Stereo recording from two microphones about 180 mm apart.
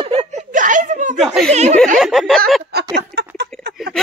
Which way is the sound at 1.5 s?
40° right (ahead or behind).